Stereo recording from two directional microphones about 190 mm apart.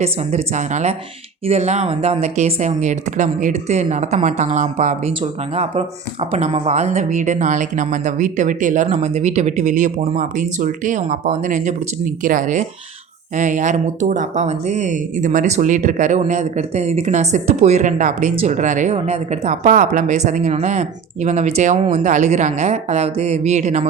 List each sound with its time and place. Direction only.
0.0 s speech: 35° right (ahead or behind)